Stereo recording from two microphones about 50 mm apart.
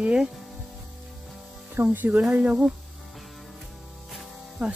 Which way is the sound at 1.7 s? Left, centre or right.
Right.